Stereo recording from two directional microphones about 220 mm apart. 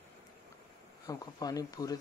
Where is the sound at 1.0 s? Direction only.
15° left (ahead or behind).